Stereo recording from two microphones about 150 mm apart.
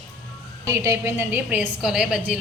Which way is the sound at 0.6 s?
20° right (ahead or behind).